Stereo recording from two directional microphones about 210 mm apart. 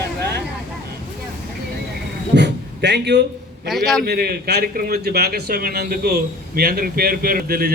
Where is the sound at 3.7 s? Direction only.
Centre (ahead or behind).